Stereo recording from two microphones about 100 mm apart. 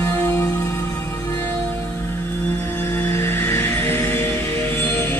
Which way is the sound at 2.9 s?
25° left (ahead or behind).